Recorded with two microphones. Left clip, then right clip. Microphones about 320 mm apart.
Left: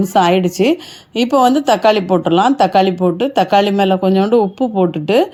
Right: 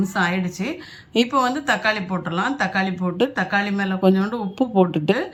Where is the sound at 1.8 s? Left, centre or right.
Left.